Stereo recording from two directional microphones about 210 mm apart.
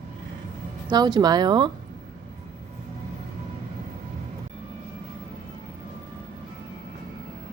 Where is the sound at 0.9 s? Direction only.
20° right (ahead or behind).